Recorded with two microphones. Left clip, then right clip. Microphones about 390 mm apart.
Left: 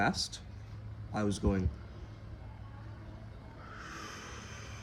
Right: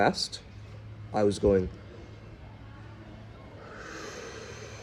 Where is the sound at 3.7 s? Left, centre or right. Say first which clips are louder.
Right 4 dB; centre.